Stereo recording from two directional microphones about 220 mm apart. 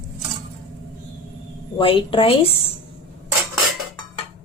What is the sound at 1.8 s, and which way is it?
Speech, 25° left (ahead or behind).